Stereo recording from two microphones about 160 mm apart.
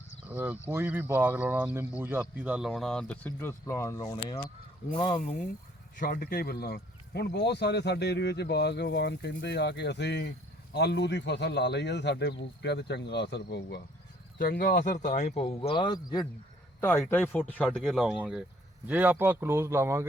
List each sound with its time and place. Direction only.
0.3 s speech: 10° right (ahead or behind); by 5.2 s 30° left (ahead or behind)
6.0 s speech: 65° left (ahead or behind); by 13.8 s 90° left
14.3 s a man's voice: 65° left (ahead or behind); by 16.2 s 25° left (ahead or behind)
17.1 s speech: 10° left (ahead or behind); by 20.1 s 15° right (ahead or behind)